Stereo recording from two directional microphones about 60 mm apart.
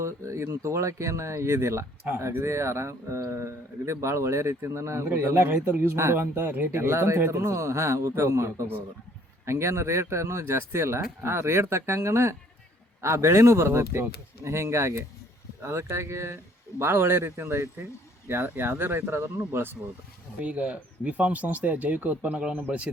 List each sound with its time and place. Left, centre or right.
0.0 s speech: right
0.6 s a man's voice: right
5.0 s speech: right
6.4 s speech: right
6.7 s a man's voice: right
20.4 s speech: right